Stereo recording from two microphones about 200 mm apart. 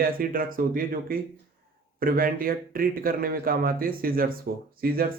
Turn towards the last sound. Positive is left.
turn(degrees=-50)  # may be behind; listen again after turning